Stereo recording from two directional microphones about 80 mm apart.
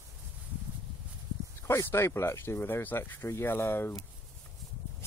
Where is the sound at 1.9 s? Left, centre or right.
Left.